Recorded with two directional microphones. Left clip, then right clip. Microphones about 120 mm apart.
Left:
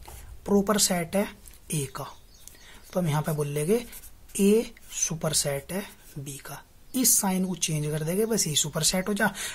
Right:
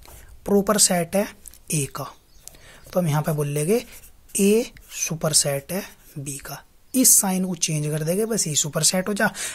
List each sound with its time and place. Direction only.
0.4 s speech: 50° right (ahead or behind)